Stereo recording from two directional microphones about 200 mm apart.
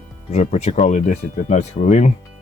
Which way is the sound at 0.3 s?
35° left (ahead or behind).